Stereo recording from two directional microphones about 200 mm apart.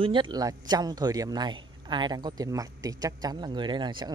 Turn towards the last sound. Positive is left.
turn(degrees=-20)  # may be behind; listen again after turning